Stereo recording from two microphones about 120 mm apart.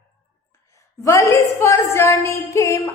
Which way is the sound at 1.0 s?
25° left (ahead or behind).